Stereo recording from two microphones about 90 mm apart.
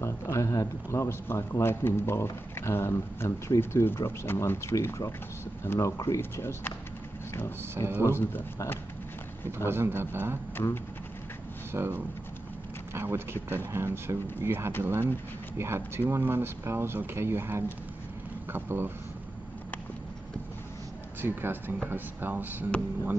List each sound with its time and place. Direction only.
0.0 s a man's voice: 35° left (ahead or behind)
7.7 s speech: 30° right (ahead or behind)
8.0 s speech: 25° left (ahead or behind)
9.7 s speech: 25° right (ahead or behind)
11.7 s speech: 25° right (ahead or behind)
21.2 s speech: 25° right (ahead or behind)